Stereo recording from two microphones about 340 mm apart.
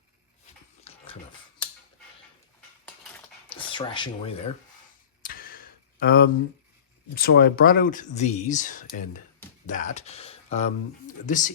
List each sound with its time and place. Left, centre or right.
0.9 s dog: centre
3.7 s speech: centre
5.2 s a sound: left
7.2 s speech: left